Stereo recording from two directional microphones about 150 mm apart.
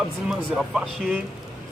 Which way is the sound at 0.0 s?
Centre (ahead or behind).